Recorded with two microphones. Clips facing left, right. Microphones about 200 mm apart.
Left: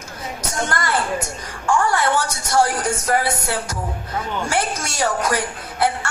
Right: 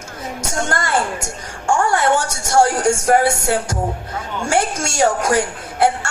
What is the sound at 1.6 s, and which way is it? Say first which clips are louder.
A woman's voice: right 2 dB; 45° right (ahead or behind).